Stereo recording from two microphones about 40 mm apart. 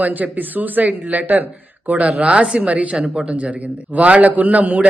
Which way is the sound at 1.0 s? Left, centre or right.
Right.